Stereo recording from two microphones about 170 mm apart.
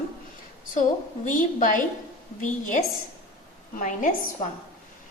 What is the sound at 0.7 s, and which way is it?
A woman's voice, 50° left (ahead or behind).